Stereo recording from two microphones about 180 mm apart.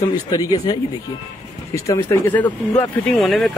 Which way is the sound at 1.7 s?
15° left (ahead or behind).